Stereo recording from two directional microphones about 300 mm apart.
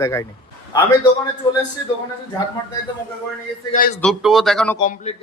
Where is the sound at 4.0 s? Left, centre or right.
Centre.